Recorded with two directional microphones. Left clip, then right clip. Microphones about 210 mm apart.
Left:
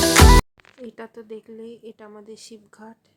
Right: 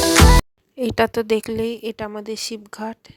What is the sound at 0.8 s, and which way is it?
A woman's voice, 50° right (ahead or behind).